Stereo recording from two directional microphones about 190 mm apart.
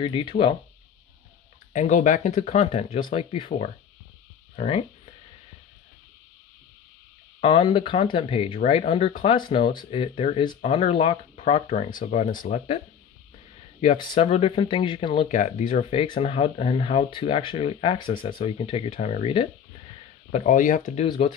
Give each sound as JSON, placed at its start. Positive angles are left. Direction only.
{"t": 0.0, "sound": "speech", "side_deg": 25}
{"t": 1.7, "sound": "speech", "side_deg": 40}
{"t": 7.3, "sound": "speech", "side_deg": 30}
{"t": 13.9, "sound": "speech", "side_deg": 25}
{"t": 15.3, "sound": "speech", "side_deg": 40}